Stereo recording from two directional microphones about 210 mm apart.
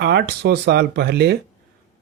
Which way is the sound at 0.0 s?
50° right (ahead or behind).